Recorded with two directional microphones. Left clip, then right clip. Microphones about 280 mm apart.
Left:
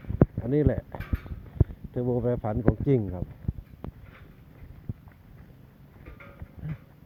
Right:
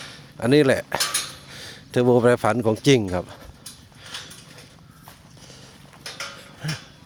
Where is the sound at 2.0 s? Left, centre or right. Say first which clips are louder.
Right 12 dB; right.